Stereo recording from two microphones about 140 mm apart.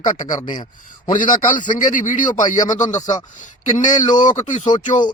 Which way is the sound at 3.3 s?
60° left (ahead or behind).